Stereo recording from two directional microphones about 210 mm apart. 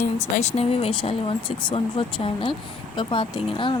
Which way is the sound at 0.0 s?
35° left (ahead or behind).